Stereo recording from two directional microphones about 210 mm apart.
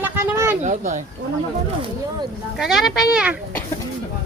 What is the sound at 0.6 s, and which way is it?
Speech, 35° right (ahead or behind).